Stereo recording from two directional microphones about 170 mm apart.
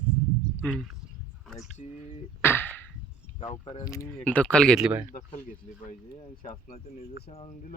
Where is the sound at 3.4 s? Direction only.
30° left (ahead or behind).